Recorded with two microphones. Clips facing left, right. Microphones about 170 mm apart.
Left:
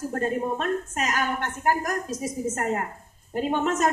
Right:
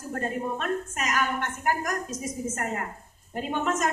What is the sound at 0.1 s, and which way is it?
A woman's voice, 35° left (ahead or behind).